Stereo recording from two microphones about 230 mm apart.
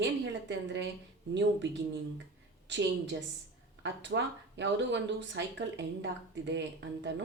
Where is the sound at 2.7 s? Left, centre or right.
Right.